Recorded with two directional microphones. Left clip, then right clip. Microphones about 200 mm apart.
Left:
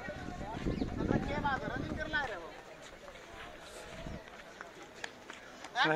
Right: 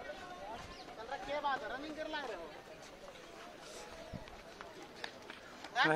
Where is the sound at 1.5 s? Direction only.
35° right (ahead or behind).